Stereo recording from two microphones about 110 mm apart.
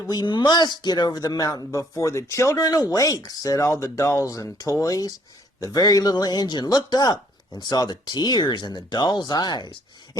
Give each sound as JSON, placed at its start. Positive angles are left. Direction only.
{"t": 0.0, "sound": "speech", "side_deg": 35}